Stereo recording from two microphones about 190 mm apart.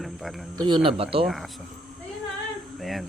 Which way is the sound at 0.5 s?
25° right (ahead or behind).